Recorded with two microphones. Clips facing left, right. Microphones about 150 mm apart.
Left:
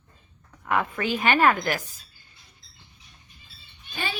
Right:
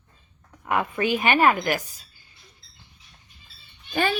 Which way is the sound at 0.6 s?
15° right (ahead or behind).